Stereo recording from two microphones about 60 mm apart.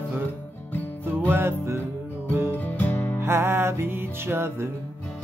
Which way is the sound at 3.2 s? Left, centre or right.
Right.